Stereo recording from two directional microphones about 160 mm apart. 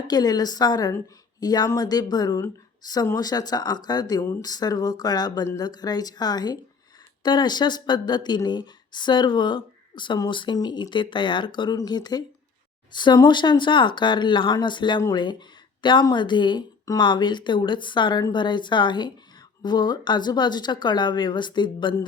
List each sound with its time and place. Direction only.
0.1 s speech: 25° left (ahead or behind)